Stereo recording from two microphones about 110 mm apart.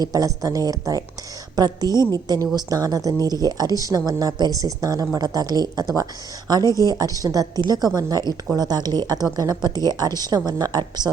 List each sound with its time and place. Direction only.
0.0 s a woman's voice: 35° right (ahead or behind)